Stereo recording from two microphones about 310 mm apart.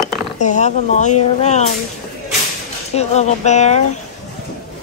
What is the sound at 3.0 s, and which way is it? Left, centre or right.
Speech, left.